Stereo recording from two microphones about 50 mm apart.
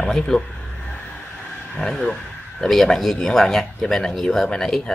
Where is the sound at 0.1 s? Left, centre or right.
Centre.